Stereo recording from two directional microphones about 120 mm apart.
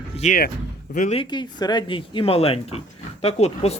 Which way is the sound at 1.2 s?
35° left (ahead or behind).